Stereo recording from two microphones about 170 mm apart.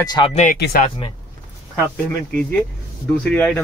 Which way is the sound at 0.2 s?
25° left (ahead or behind).